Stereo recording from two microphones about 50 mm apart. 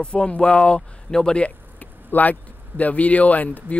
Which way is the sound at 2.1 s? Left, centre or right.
Left.